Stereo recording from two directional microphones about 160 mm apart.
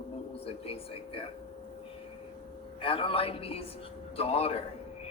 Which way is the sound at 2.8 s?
35° left (ahead or behind).